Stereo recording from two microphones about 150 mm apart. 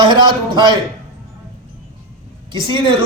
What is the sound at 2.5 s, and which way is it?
Speech, 35° right (ahead or behind).